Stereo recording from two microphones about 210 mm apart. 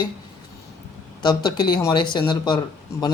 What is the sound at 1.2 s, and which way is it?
Speech, 20° left (ahead or behind).